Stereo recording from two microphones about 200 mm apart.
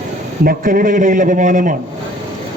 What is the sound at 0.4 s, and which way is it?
A man's voice, 45° right (ahead or behind).